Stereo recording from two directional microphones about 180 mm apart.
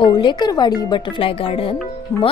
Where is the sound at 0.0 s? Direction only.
25° left (ahead or behind).